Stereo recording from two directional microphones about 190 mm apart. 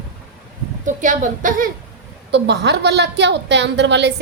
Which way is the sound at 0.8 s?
40° right (ahead or behind).